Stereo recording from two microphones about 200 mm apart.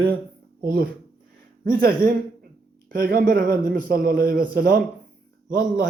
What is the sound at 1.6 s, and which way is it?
Speech, 45° right (ahead or behind).